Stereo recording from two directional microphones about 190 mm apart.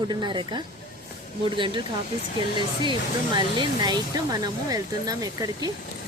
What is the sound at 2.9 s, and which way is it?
Speech, 25° right (ahead or behind).